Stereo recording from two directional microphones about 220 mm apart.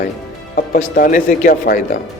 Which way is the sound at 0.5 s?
40° left (ahead or behind).